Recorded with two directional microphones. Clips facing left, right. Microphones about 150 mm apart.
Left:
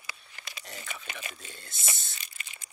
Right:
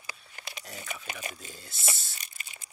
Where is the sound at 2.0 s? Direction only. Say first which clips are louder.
Even; 5° right (ahead or behind).